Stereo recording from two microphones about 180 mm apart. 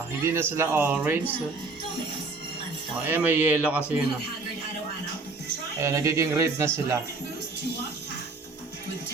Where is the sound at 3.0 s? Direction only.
10° right (ahead or behind).